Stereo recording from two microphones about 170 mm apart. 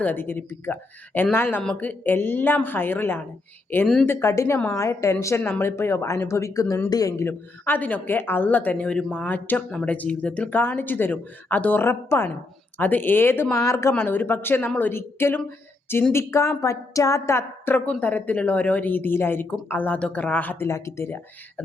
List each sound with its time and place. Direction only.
0.0 s speech: 10° left (ahead or behind)